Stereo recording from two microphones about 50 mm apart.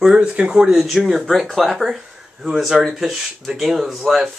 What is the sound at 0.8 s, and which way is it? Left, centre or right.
Speech, centre.